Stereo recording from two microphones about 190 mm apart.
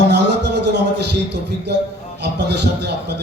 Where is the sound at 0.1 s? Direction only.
60° right (ahead or behind).